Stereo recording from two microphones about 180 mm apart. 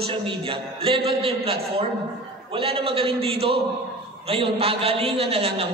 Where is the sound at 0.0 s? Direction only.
30° right (ahead or behind).